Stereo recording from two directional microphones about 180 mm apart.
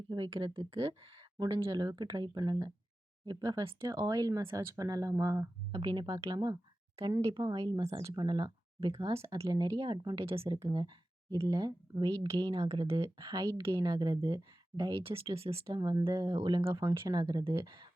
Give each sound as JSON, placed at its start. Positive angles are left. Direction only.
{"t": 0.1, "sound": "speech", "side_deg": -25}
{"t": 15.6, "sound": "speech", "side_deg": -20}
{"t": 16.4, "sound": "speech", "side_deg": -30}